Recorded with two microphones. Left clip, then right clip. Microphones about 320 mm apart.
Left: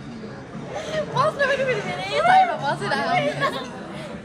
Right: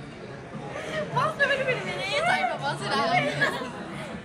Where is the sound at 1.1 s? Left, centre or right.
Left.